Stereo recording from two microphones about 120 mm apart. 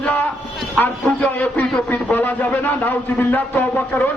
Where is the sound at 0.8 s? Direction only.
15° left (ahead or behind).